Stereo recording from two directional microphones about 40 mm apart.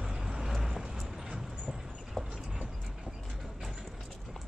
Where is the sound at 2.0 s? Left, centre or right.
Centre.